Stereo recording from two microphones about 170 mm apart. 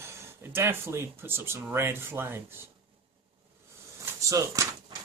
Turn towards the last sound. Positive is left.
turn(degrees=-20)  # may be behind; listen again after turning